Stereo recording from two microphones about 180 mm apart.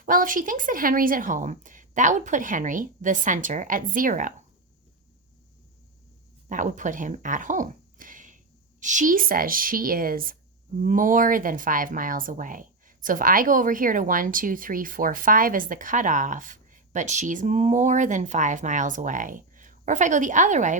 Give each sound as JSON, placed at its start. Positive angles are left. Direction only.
{"t": 0.0, "sound": "speech", "side_deg": -50}
{"t": 6.5, "sound": "speech", "side_deg": -45}